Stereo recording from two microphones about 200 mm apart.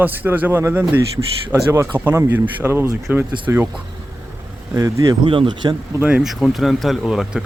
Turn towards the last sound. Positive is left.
turn(degrees=0)  # may be behind; listen again after turning